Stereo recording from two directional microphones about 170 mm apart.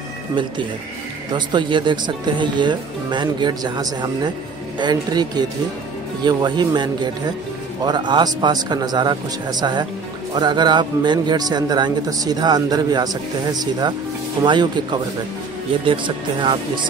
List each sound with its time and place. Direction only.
1.3 s a man's voice: 25° right (ahead or behind)